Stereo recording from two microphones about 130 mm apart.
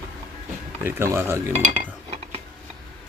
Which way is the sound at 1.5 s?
50° right (ahead or behind).